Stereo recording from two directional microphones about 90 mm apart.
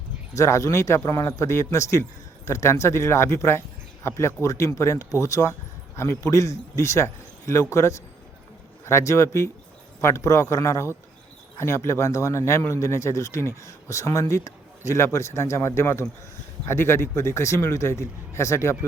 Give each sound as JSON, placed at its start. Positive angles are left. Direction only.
{"t": 0.3, "sound": "speech", "side_deg": 35}